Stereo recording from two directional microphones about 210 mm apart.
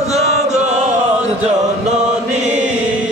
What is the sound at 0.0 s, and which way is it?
Chant, 30° right (ahead or behind).